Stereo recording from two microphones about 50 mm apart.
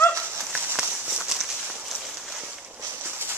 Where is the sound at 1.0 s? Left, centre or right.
Centre.